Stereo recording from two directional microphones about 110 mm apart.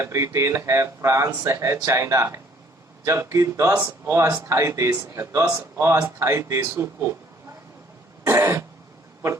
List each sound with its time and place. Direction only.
0.0 s speech: 25° right (ahead or behind)
8.3 s throat clearing: 25° right (ahead or behind)